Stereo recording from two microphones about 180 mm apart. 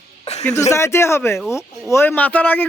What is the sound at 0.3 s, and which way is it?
Music, 35° left (ahead or behind).